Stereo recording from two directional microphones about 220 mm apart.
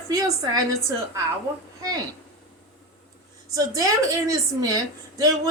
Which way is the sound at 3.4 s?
15° right (ahead or behind).